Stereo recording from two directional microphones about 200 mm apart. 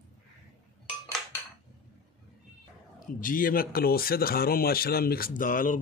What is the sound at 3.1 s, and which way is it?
Speech, 40° left (ahead or behind).